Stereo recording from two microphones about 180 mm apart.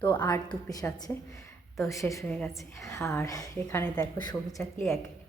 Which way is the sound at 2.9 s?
15° left (ahead or behind).